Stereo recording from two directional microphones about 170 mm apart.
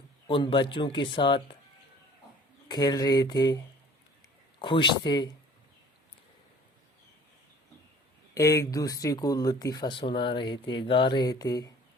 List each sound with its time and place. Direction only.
0.3 s speech: 30° left (ahead or behind)
2.6 s speech: 25° left (ahead or behind)
4.6 s speech: 30° left (ahead or behind)
8.4 s speech: 20° left (ahead or behind)